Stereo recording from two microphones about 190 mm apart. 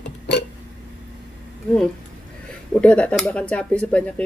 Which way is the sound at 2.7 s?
5° left (ahead or behind).